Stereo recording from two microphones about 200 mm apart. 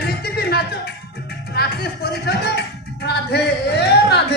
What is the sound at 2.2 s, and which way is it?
Music, 55° left (ahead or behind).